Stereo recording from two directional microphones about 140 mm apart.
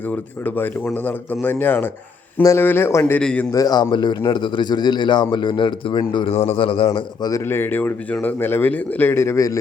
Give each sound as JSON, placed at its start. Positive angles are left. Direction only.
{"t": 0.1, "sound": "speech", "side_deg": 10}
{"t": 3.5, "sound": "a man's voice", "side_deg": 25}
{"t": 6.3, "sound": "a man's voice", "side_deg": 50}
{"t": 7.4, "sound": "speech", "side_deg": 15}